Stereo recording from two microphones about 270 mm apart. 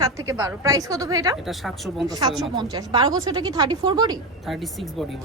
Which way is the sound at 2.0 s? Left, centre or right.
Centre.